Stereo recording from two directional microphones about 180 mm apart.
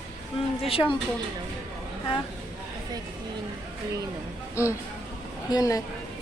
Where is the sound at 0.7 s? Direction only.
30° left (ahead or behind).